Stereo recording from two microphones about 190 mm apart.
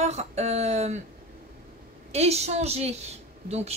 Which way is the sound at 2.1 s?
35° right (ahead or behind).